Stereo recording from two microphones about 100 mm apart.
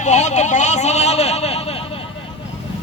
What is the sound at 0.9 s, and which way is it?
Speech, 90° left.